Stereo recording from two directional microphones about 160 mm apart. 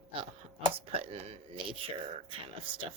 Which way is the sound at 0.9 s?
35° right (ahead or behind).